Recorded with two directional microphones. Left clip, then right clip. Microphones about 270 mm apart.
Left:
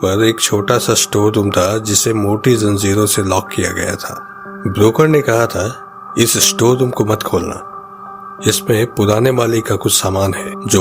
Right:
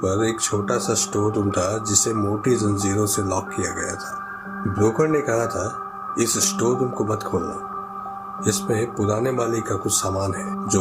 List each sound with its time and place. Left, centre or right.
0.0 s speech: left
8.4 s speech: left